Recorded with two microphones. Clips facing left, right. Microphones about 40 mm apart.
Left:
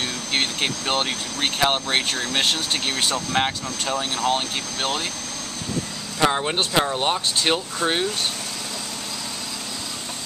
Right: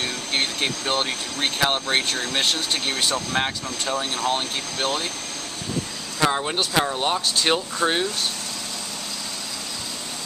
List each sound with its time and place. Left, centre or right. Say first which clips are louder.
0.3 s speech: left 1 dB; centre
3.9 s speech: left 1 dB; centre
6.2 s speech: left 1 dB; centre
7.4 s speech: right 1 dB; centre